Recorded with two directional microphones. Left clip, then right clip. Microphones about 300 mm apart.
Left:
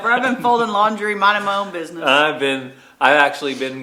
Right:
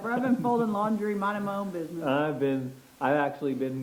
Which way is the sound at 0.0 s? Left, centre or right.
Centre.